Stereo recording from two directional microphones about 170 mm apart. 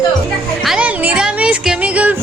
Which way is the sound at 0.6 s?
5° right (ahead or behind).